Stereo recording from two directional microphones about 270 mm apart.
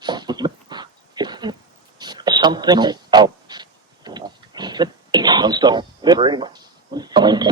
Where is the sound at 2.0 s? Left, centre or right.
Centre.